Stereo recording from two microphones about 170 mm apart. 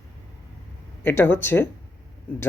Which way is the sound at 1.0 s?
15° left (ahead or behind).